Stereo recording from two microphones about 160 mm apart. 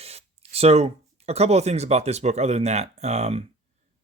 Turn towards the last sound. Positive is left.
turn(degrees=-40)  # may be behind; listen again after turning